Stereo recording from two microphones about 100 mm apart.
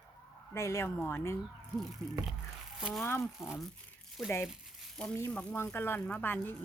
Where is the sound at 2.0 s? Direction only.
5° left (ahead or behind).